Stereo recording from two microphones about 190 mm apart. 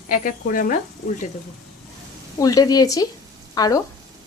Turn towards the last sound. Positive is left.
turn(degrees=20)  # may be behind; listen again after turning